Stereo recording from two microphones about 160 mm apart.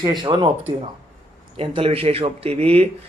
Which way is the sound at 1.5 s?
35° right (ahead or behind).